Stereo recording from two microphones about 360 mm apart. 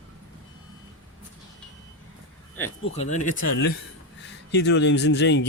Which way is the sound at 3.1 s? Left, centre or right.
Centre.